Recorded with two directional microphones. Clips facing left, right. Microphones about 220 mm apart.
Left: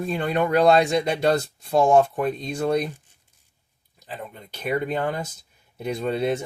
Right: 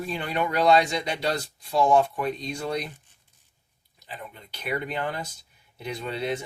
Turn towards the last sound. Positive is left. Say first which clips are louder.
# left 6 dB
turn(degrees=50)  # may be behind; listen again after turning